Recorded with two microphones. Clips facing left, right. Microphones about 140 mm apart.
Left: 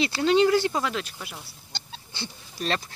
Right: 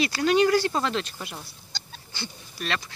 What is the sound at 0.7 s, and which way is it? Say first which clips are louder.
Speech: right 1 dB; 10° left (ahead or behind).